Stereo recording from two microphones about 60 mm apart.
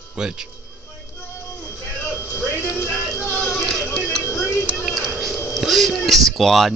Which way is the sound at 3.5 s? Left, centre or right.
Centre.